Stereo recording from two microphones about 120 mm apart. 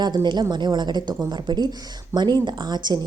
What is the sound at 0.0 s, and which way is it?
A woman's voice, 35° right (ahead or behind).